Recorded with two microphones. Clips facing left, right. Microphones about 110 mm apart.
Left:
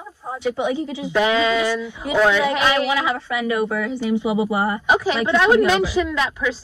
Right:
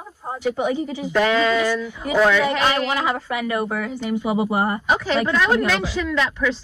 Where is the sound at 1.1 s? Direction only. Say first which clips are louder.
Even; 10° left (ahead or behind).